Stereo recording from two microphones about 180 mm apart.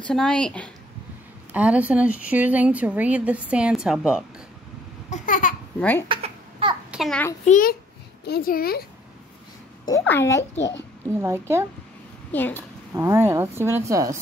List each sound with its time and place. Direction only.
0.0 s a woman's voice: 5° left (ahead or behind)
1.5 s speech: 10° right (ahead or behind)
5.1 s a sound: 45° left (ahead or behind)
5.8 s speech: 10° left (ahead or behind)
6.0 s babbling: 30° right (ahead or behind)
6.9 s a child's voice: centre (ahead or behind)
7.4 s a child's voice: 45° left (ahead or behind)
9.8 s speech: 15° left (ahead or behind)
11.1 s speech: 15° right (ahead or behind)
12.3 s speech: 10° left (ahead or behind)
12.9 s speech: 15° right (ahead or behind)